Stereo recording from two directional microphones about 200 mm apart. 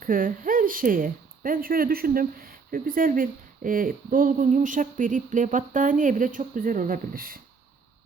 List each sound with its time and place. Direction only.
0.0 s speech: 45° right (ahead or behind)